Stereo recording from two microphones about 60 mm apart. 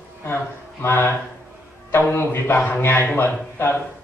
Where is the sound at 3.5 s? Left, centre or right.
Left.